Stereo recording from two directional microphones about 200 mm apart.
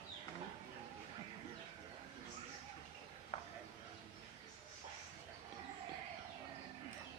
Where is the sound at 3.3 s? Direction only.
35° left (ahead or behind).